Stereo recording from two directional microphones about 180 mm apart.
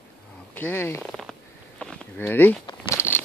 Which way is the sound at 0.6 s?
10° left (ahead or behind).